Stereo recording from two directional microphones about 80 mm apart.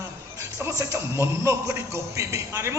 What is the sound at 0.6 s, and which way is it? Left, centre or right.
A man's voice, right.